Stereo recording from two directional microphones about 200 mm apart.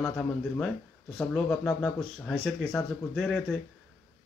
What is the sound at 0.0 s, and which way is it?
Speech, centre (ahead or behind).